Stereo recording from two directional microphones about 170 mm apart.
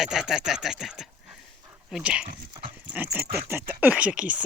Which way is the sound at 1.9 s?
5° right (ahead or behind).